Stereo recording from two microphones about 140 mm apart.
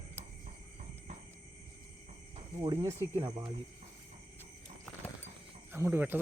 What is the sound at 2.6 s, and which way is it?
Speech, 35° right (ahead or behind).